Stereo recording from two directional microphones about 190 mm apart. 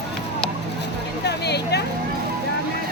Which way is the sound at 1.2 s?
60° left (ahead or behind).